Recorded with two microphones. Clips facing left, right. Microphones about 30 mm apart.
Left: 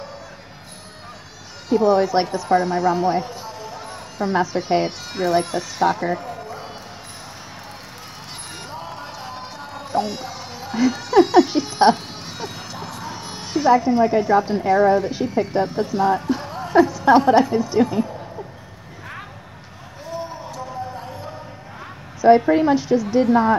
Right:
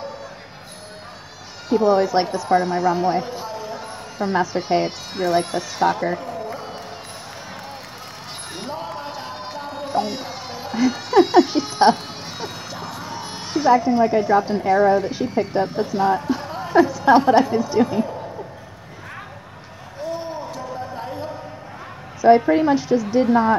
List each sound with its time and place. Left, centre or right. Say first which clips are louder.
1.7 s a woman's voice: even; centre
8.5 s a sound: right 5 dB; centre
9.9 s music: left 1 dB; centre
10.2 s music: right 1 dB; right
11.0 s a sound: left 1 dB; right
11.3 s a woman's voice: even; centre
22.2 s a woman's voice: even; centre